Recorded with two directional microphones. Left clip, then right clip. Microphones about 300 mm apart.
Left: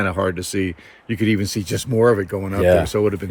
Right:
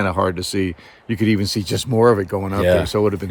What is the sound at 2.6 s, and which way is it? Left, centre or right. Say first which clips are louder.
Speech: left 1 dB; centre.